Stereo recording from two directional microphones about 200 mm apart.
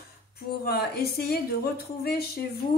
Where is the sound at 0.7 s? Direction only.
50° left (ahead or behind).